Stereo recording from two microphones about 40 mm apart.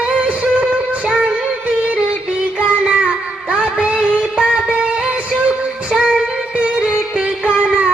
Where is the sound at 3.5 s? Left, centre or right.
Right.